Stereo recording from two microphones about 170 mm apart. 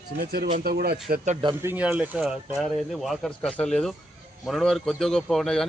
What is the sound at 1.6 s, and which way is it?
A man's voice, 10° right (ahead or behind).